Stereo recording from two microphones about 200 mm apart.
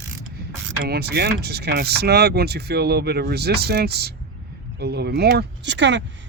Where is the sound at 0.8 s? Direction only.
50° right (ahead or behind).